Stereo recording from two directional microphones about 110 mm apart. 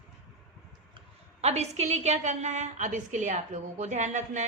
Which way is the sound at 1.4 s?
85° right.